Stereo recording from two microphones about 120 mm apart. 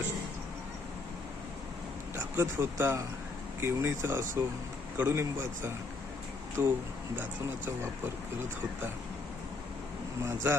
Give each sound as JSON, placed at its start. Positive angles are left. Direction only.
{"t": 2.1, "sound": "a man's voice", "side_deg": -20}
{"t": 10.2, "sound": "a man's voice", "side_deg": -20}